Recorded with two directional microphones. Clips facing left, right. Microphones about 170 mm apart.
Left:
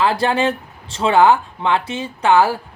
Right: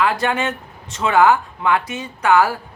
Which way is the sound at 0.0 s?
30° left (ahead or behind).